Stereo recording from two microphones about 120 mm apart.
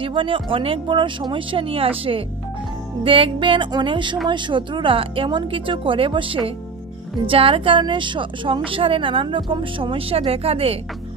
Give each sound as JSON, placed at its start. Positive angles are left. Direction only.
{"t": 0.0, "sound": "a woman's voice", "side_deg": -45}